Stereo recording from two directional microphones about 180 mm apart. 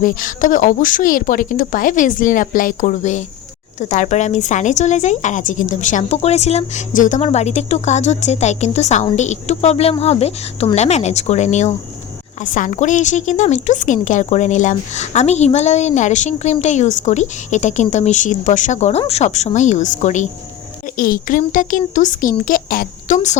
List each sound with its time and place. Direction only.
0.0 s a woman's voice: 50° left (ahead or behind)